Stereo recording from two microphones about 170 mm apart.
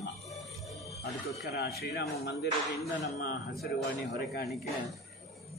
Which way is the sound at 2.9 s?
90° left.